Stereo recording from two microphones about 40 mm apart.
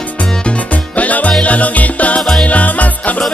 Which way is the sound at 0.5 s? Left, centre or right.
Left.